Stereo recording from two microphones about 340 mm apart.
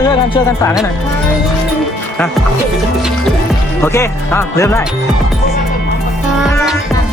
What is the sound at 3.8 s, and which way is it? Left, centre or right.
Music, centre.